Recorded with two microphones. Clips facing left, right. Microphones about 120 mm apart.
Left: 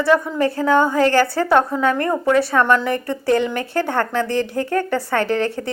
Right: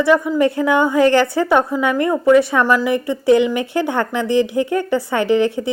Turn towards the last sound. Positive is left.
turn(degrees=-15)  # may be behind; listen again after turning